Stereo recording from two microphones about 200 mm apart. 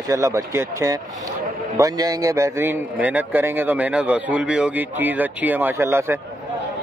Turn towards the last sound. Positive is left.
turn(degrees=-10)  # may be behind; listen again after turning